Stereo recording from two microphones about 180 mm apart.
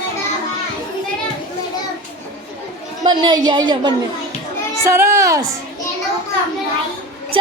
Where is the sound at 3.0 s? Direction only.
25° right (ahead or behind).